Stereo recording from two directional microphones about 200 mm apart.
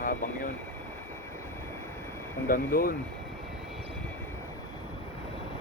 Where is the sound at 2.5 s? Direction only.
45° left (ahead or behind).